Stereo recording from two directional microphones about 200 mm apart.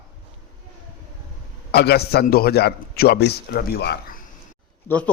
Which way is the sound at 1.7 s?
55° left (ahead or behind).